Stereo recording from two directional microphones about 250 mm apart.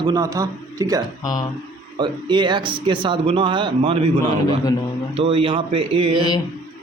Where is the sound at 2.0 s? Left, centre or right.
Centre.